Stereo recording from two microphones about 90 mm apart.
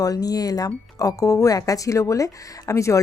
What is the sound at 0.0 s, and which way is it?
A woman's voice, 45° left (ahead or behind).